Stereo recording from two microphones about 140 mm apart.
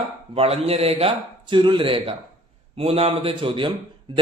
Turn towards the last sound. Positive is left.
turn(degrees=-40)  # may be behind; listen again after turning